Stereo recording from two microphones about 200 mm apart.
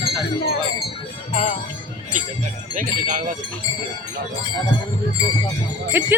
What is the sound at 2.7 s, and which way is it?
Speech, 40° right (ahead or behind).